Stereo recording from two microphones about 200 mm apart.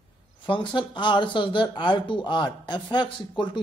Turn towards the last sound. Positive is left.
turn(degrees=25)  # may be behind; listen again after turning